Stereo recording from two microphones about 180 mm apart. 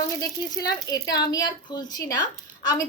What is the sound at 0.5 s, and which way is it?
A woman's voice, 20° left (ahead or behind).